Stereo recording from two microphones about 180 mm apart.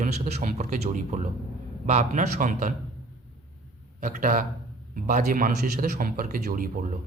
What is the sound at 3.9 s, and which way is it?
Speech, 50° right (ahead or behind).